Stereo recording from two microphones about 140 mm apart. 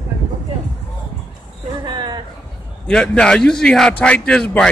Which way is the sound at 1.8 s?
30° right (ahead or behind).